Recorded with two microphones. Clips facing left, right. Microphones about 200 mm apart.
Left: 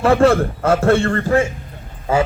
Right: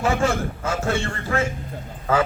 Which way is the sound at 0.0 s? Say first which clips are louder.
Left 8 dB; 60° left (ahead or behind).